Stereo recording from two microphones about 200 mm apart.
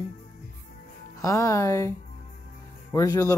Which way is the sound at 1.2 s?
15° left (ahead or behind).